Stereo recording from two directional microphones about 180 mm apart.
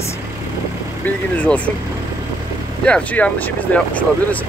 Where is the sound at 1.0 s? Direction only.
5° left (ahead or behind).